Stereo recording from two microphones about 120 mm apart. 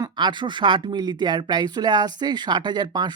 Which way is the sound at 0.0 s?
40° right (ahead or behind).